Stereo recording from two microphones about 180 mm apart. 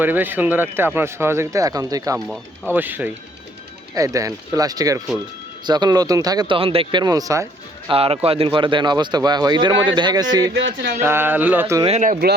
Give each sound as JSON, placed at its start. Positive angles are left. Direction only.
{"t": 0.0, "sound": "speech", "side_deg": -10}
{"t": 2.1, "sound": "speech", "side_deg": 0}
{"t": 7.9, "sound": "speech", "side_deg": -30}
{"t": 10.5, "sound": "speech", "side_deg": -85}
{"t": 11.0, "sound": "speech", "side_deg": -15}
{"t": 11.9, "sound": "speech", "side_deg": -45}